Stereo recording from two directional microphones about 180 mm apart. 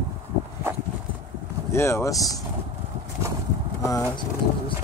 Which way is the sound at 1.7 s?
15° left (ahead or behind).